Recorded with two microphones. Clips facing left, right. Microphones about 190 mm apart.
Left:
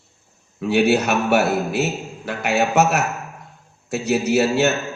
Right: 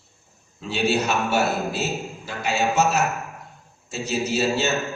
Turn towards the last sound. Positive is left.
turn(degrees=65)  # may be behind; listen again after turning